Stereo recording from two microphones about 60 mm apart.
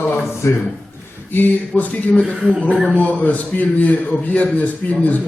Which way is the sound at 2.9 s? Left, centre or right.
Left.